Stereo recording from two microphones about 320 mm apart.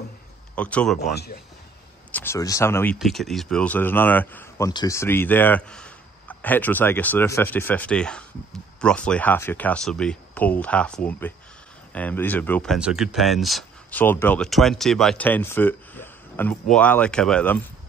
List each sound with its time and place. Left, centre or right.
0.6 s speech: centre
1.1 s speech: left
2.1 s speech: centre